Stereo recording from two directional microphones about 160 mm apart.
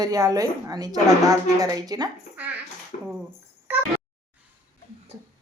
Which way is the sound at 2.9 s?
50° left (ahead or behind).